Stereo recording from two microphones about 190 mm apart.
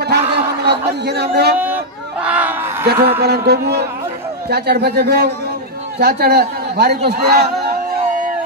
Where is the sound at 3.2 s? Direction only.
60° right (ahead or behind).